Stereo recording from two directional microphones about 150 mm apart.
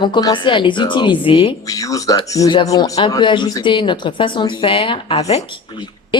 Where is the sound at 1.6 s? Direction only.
20° left (ahead or behind); by 5.4 s 45° left (ahead or behind).